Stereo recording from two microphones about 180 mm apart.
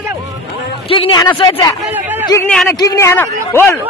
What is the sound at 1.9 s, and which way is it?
Speech, 10° right (ahead or behind).